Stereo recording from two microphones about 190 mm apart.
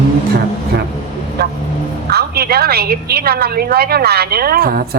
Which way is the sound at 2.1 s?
55° right (ahead or behind).